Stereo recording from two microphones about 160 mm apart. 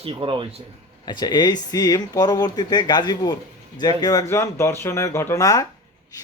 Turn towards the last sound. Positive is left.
turn(degrees=20)  # may be behind; listen again after turning